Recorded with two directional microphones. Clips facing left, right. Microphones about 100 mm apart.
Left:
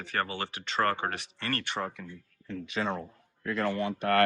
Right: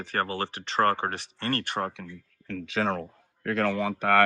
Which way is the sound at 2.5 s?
90° right.